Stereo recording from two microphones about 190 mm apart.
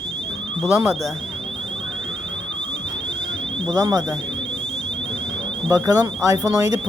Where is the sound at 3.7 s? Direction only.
20° right (ahead or behind).